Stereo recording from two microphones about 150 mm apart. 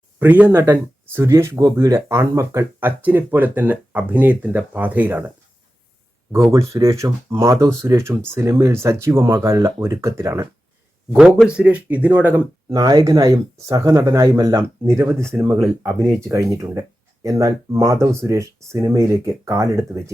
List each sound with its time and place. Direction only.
0.2 s speech: 10° right (ahead or behind)
6.5 s speech: 20° right (ahead or behind)
11.4 s speech: 10° right (ahead or behind)
12.7 s speech: 25° right (ahead or behind)